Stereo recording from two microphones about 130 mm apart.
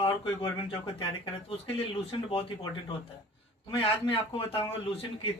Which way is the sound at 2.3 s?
40° left (ahead or behind).